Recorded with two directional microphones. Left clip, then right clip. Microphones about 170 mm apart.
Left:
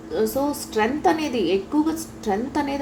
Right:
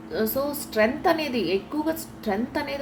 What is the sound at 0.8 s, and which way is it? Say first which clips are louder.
A woman's voice: left 1 dB; 15° left (ahead or behind).